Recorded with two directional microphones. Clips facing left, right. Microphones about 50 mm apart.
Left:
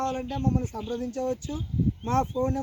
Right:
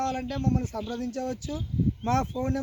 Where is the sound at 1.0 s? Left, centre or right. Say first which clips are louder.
Left 1 dB; right.